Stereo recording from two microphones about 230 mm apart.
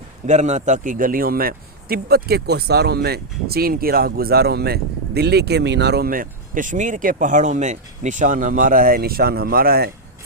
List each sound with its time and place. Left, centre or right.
0.3 s a man's voice: right